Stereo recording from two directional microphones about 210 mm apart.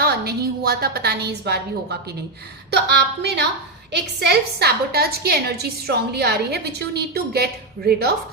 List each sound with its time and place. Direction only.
0.0 s a woman's voice: 50° right (ahead or behind)